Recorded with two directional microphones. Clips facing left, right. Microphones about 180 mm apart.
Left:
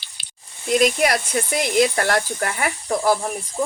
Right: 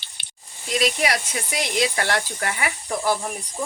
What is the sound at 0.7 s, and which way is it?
Speech, 50° left (ahead or behind).